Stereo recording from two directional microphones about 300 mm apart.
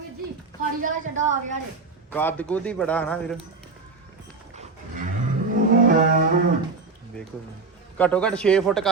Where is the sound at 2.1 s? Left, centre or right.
Centre.